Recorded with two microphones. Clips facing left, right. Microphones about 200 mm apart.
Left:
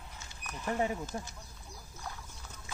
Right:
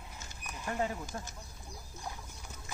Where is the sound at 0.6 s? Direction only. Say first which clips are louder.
Left 2 dB; 15° left (ahead or behind).